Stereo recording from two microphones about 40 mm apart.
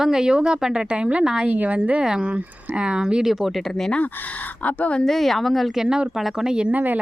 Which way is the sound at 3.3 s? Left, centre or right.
Centre.